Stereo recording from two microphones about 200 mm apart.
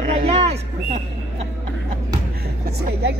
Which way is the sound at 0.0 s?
30° right (ahead or behind).